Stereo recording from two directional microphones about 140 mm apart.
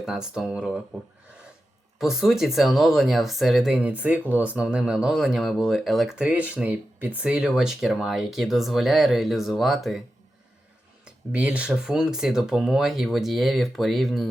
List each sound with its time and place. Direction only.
0.0 s speech: 5° right (ahead or behind)
2.0 s speech: 5° right (ahead or behind)
11.0 s speech: 5° right (ahead or behind)